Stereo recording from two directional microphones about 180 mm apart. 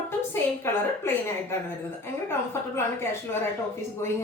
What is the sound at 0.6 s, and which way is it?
A woman's voice, 15° left (ahead or behind).